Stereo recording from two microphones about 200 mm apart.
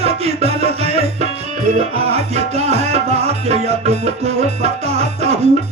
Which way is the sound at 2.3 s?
30° right (ahead or behind).